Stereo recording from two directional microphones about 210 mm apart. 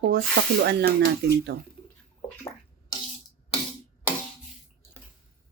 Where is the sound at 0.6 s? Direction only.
55° right (ahead or behind).